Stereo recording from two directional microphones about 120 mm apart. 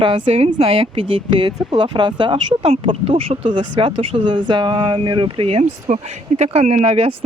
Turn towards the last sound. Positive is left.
turn(degrees=-55)  # may be behind; listen again after turning